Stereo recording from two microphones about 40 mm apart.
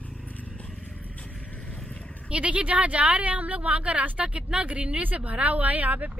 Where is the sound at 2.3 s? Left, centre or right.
Right.